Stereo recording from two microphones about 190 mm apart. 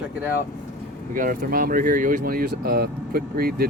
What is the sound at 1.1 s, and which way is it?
Speech, 45° right (ahead or behind).